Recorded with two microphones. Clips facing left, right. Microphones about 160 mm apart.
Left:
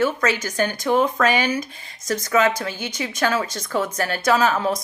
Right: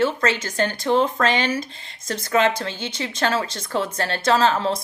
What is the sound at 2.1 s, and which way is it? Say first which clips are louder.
Speech: left 1 dB; 25° right (ahead or behind).